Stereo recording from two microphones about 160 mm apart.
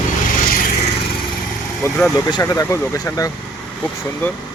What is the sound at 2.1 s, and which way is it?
Speech, 25° left (ahead or behind).